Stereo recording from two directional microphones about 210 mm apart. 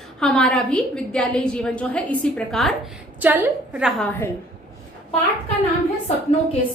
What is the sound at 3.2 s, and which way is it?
Speech, 10° right (ahead or behind).